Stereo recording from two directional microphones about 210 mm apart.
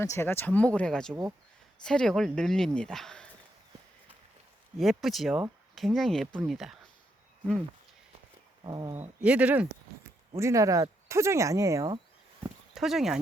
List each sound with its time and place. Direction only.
0.0 s speech: 10° left (ahead or behind)
4.8 s speech: centre (ahead or behind)
8.6 s speech: 20° right (ahead or behind)
9.2 s speech: 5° right (ahead or behind)
12.4 s dog: centre (ahead or behind)